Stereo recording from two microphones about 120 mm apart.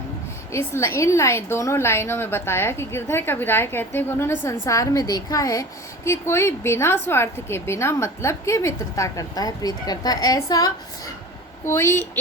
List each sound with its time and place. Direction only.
0.5 s a woman's voice: 20° left (ahead or behind)